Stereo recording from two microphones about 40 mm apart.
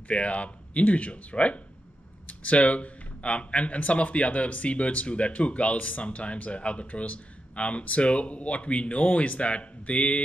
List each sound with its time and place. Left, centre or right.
0.1 s speech: left